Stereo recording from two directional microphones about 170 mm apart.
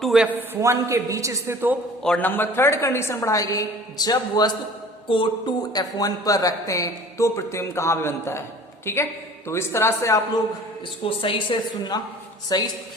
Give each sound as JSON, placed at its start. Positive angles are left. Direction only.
{"t": 0.0, "sound": "a man's voice", "side_deg": -5}
{"t": 2.0, "sound": "a woman's voice", "side_deg": 10}
{"t": 11.0, "sound": "speech", "side_deg": 30}